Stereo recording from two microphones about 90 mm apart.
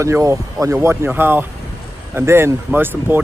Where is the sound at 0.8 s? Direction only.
25° right (ahead or behind).